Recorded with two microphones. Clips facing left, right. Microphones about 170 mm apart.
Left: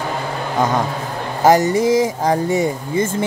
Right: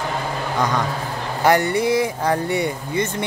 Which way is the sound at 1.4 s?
40° left (ahead or behind).